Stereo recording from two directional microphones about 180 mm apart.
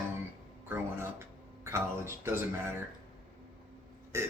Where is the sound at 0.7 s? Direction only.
15° right (ahead or behind).